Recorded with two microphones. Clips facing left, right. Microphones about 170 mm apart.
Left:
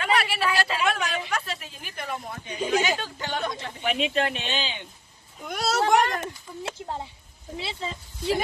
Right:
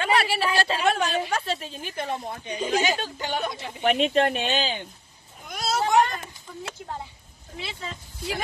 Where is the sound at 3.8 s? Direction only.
50° right (ahead or behind).